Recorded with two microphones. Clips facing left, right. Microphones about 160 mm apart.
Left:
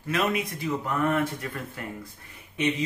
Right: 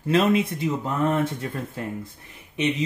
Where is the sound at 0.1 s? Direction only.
30° right (ahead or behind).